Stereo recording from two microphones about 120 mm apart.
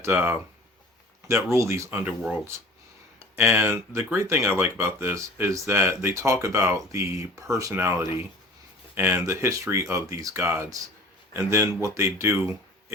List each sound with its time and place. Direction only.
0.0 s speech: 20° right (ahead or behind)
3.3 s speech: 20° right (ahead or behind)